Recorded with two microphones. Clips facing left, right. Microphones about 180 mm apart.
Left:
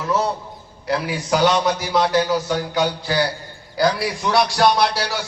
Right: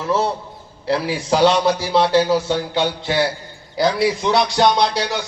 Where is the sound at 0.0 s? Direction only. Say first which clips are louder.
Right 1 dB; 30° right (ahead or behind).